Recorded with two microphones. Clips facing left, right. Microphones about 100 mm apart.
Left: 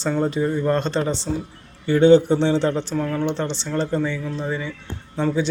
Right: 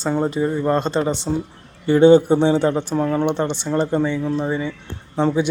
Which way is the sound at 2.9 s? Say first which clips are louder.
Right 4 dB; 25° right (ahead or behind).